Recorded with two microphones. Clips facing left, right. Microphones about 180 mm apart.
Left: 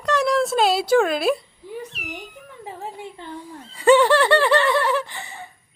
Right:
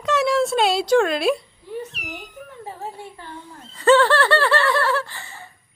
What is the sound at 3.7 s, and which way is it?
Laughter, 15° left (ahead or behind).